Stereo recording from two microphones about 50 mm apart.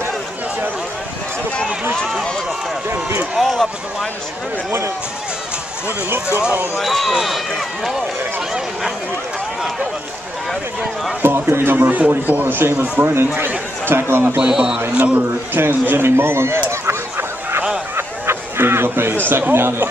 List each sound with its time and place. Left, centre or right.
3.3 s speech: centre
6.8 s speech: centre
11.2 s speech: right
11.9 s a man's voice: right
14.5 s a man's voice: centre
15.0 s a man's voice: right
15.8 s speech: right
17.9 s fowl: right
19.2 s speech: right